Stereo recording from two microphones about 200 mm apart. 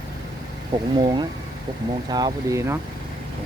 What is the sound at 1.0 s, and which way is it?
Speech, 25° right (ahead or behind).